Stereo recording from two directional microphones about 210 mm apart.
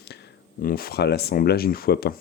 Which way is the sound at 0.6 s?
45° left (ahead or behind).